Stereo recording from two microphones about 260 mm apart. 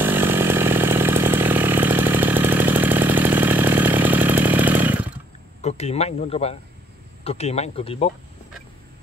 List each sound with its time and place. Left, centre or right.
0.0 s chainsaw: centre
5.6 s speech: left